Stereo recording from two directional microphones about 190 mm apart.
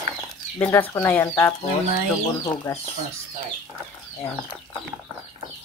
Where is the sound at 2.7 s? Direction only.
20° left (ahead or behind).